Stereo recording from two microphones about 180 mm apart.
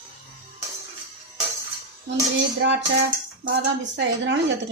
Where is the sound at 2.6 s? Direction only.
90° right.